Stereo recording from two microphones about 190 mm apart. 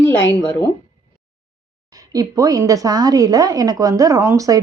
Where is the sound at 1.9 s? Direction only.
20° right (ahead or behind).